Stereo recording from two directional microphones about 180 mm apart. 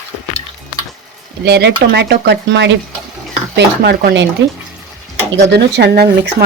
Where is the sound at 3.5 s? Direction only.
65° right (ahead or behind).